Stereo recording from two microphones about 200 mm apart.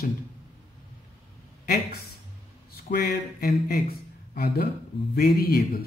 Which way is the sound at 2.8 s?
50° left (ahead or behind).